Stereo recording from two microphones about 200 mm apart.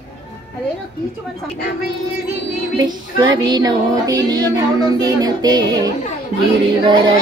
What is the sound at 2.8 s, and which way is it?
Music, 20° right (ahead or behind).